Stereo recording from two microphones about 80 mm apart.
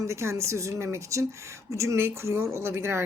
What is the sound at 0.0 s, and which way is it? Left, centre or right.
A woman's voice, right.